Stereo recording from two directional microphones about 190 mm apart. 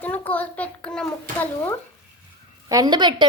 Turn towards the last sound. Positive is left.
turn(degrees=-25)  # may be behind; listen again after turning